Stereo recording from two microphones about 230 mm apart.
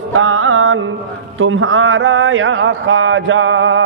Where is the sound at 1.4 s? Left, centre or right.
Right.